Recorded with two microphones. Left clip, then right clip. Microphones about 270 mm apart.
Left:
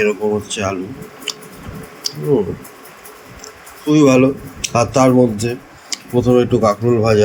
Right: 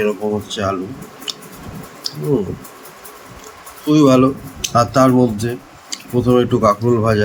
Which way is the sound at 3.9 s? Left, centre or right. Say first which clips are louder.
Left 1 dB; centre.